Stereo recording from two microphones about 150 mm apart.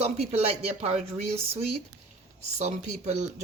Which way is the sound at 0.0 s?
45° right (ahead or behind).